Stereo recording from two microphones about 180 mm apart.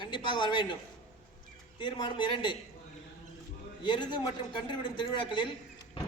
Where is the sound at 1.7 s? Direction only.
25° left (ahead or behind).